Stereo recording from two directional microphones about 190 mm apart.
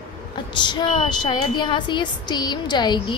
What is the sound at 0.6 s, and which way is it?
A woman's voice, 25° left (ahead or behind).